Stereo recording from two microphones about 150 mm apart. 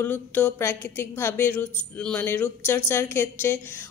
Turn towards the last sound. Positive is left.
turn(degrees=15)  # may be behind; listen again after turning